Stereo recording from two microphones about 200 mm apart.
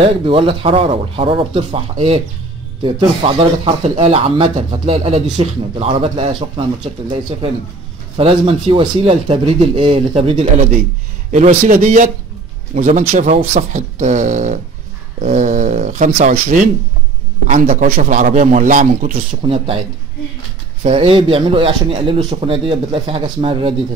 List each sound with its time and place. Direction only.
0.0 s a man's voice: 25° right (ahead or behind)
19.4 s speech: 25° right (ahead or behind)
20.8 s speech: 30° right (ahead or behind)